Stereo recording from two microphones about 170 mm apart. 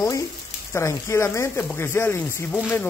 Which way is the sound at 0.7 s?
15° left (ahead or behind).